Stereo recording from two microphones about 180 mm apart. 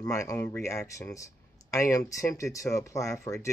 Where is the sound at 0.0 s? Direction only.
20° left (ahead or behind).